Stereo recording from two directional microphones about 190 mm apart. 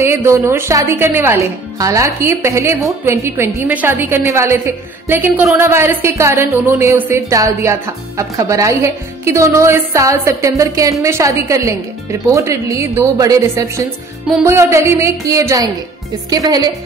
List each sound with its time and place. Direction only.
0.0 s a woman's voice: 15° right (ahead or behind)